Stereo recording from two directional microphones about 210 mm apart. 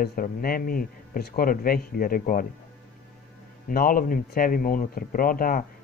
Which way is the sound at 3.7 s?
45° left (ahead or behind).